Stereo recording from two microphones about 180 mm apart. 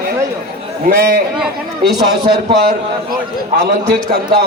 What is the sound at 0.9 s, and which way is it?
Speech, 55° right (ahead or behind).